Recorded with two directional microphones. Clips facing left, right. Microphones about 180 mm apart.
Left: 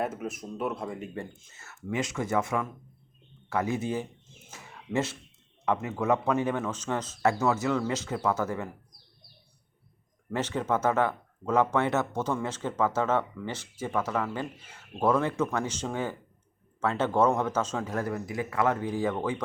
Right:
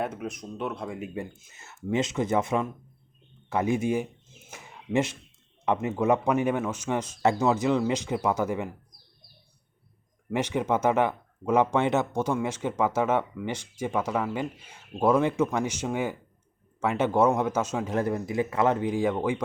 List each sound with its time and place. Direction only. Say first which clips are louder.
0.0 s speech: even; 5° left (ahead or behind); by 4.1 s 15° right (ahead or behind)
4.5 s a sound: right 3 dB; 15° right (ahead or behind)
5.6 s speech: right 3 dB; 20° right (ahead or behind)
10.2 s speech: right 3 dB; 15° right (ahead or behind)